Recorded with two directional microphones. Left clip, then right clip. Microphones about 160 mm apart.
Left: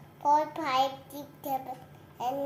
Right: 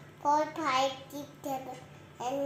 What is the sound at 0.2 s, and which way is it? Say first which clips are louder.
A child's voice: left 3 dB; 30° left (ahead or behind).